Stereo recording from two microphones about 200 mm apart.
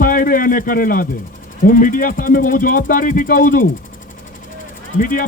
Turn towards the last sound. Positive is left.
turn(degrees=45)  # may be behind; listen again after turning